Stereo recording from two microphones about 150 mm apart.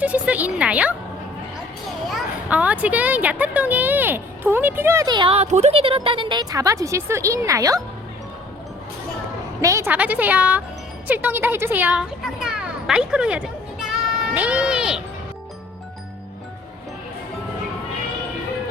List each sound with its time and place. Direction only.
0.0 s a woman's voice: 10° right (ahead or behind)
2.0 s a child's voice: 10° right (ahead or behind)
5.0 s a woman's voice: 30° right (ahead or behind)
9.6 s a woman's voice: 20° right (ahead or behind); by 15.0 s 5° right (ahead or behind)